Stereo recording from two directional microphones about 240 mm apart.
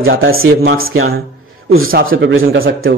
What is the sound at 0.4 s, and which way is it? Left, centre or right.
A man's voice, right.